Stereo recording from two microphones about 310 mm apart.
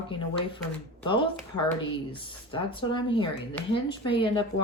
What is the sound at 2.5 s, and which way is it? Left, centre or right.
Speech, centre.